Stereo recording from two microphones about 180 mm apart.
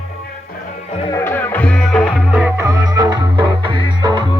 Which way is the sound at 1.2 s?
10° left (ahead or behind).